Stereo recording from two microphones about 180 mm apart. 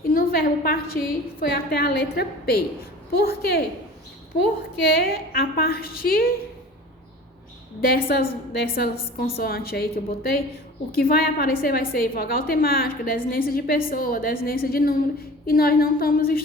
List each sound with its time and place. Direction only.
0.1 s a woman's voice: 55° left (ahead or behind)
4.9 s a woman's voice: 55° left (ahead or behind)
7.8 s a woman's voice: 55° left (ahead or behind)